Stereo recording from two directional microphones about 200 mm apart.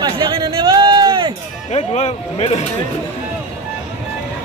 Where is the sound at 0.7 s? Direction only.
20° right (ahead or behind).